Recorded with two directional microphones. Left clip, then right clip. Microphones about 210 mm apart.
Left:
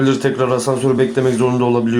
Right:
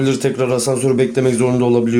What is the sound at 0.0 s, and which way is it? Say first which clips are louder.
Speech: left 1 dB; 25° right (ahead or behind).